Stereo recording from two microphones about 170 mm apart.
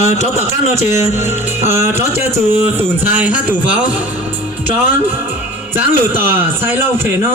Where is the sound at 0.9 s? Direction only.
15° right (ahead or behind).